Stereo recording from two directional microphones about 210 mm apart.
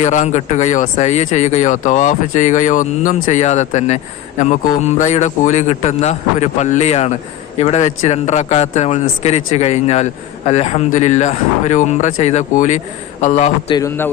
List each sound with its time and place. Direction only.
0.0 s speech: 35° left (ahead or behind)
13.7 s a man's voice: 10° left (ahead or behind)